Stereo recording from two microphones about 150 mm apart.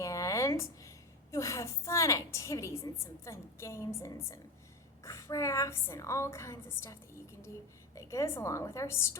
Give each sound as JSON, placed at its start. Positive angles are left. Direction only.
{"t": 0.0, "sound": "a woman's voice", "side_deg": 20}